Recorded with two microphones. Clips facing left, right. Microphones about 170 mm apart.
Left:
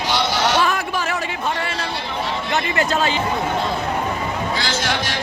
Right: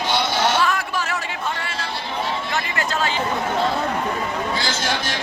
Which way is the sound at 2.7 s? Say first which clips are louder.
Left 4 dB; 20° left (ahead or behind).